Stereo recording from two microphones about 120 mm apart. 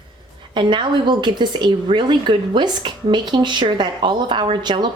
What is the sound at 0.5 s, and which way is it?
Speech, 40° right (ahead or behind).